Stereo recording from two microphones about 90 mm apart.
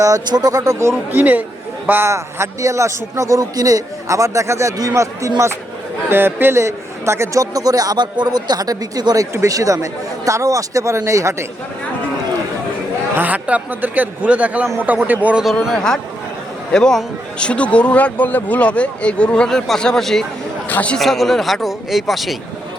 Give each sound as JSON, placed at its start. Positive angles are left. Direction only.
{"t": 0.0, "sound": "a man's voice", "side_deg": -45}
{"t": 6.1, "sound": "a man's voice", "side_deg": -25}
{"t": 13.1, "sound": "a man's voice", "side_deg": -20}
{"t": 15.6, "sound": "speech", "side_deg": 5}
{"t": 20.7, "sound": "speech", "side_deg": 15}
{"t": 21.0, "sound": "speech", "side_deg": 0}